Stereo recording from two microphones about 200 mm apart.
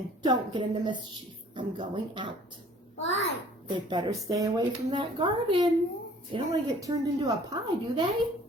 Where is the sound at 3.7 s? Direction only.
20° right (ahead or behind).